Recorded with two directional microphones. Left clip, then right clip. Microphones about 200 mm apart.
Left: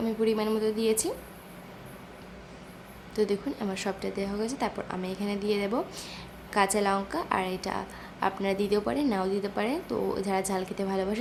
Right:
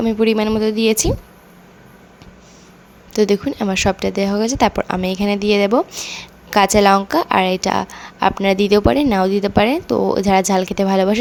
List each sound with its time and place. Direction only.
0.0 s speech: 40° right (ahead or behind)
3.1 s speech: 40° right (ahead or behind)